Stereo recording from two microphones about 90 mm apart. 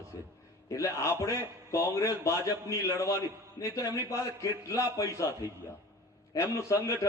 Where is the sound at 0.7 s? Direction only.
35° left (ahead or behind).